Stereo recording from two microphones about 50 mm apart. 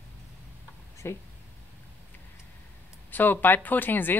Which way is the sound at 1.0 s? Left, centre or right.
Left.